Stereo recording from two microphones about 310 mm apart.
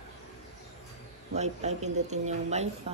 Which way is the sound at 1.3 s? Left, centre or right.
Right.